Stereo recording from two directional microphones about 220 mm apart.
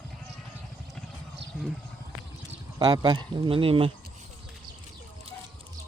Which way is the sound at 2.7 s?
20° right (ahead or behind).